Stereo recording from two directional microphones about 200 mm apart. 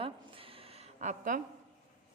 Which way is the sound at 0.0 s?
25° right (ahead or behind).